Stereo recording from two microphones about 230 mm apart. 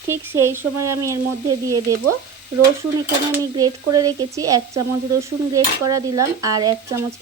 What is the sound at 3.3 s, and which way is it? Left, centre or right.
Speech, centre.